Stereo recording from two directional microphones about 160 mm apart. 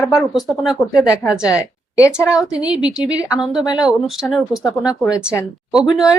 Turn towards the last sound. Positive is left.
turn(degrees=-5)  # may be behind; listen again after turning